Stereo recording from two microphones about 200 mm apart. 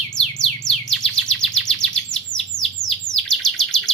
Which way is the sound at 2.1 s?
5° left (ahead or behind).